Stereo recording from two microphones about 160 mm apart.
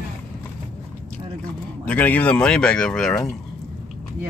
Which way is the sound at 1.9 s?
10° left (ahead or behind).